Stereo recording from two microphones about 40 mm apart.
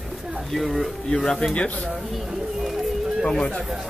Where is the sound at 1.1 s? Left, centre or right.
Centre.